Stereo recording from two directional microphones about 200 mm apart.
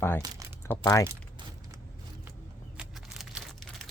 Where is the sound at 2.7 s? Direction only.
5° right (ahead or behind).